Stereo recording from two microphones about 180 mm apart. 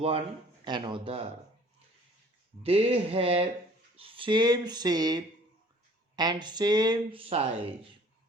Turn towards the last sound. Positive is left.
turn(degrees=-30)  # may be behind; listen again after turning